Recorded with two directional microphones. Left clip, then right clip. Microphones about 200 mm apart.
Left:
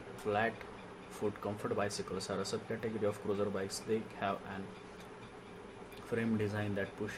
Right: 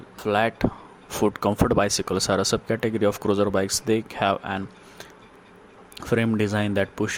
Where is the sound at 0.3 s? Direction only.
50° right (ahead or behind).